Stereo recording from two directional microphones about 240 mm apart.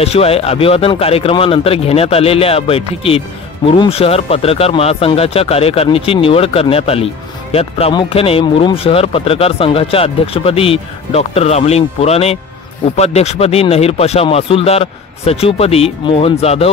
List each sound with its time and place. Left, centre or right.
0.0 s speech: left